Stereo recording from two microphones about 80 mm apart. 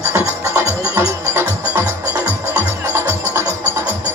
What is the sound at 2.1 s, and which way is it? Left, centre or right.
Music, right.